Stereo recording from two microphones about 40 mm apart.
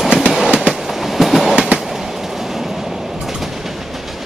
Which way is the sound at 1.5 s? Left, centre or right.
Right.